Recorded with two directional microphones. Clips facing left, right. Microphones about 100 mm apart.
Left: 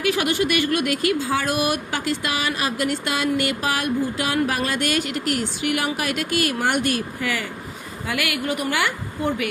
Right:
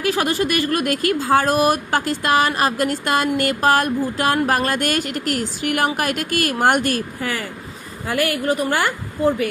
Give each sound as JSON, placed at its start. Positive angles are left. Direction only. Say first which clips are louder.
{"t": 0.0, "sound": "a woman's voice", "louder": "right 1 dB", "side_deg": -35}